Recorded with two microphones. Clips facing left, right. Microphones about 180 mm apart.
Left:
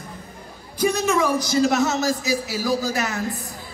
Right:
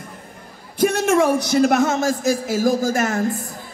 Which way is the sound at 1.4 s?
60° right (ahead or behind).